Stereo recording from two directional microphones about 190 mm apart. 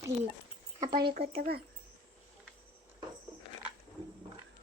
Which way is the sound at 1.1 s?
55° right (ahead or behind).